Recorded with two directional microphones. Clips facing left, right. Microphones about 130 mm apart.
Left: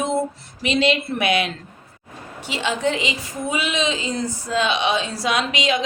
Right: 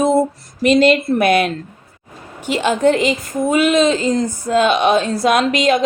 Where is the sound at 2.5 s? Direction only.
50° right (ahead or behind).